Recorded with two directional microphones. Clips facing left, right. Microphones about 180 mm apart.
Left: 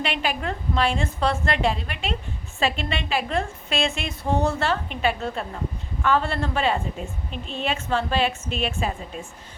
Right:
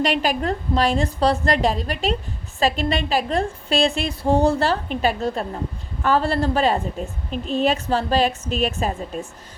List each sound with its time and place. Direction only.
0.0 s a woman's voice: 40° right (ahead or behind)